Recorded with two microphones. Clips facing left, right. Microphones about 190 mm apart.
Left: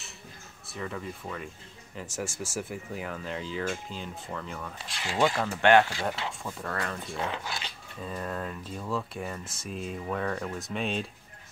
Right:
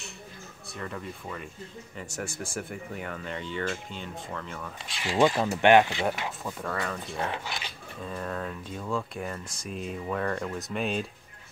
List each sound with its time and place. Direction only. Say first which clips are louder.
0.7 s speech: left 1 dB; centre (ahead or behind)
5.2 s speech: right 3 dB; 20° right (ahead or behind)
6.6 s speech: right 1 dB; centre (ahead or behind)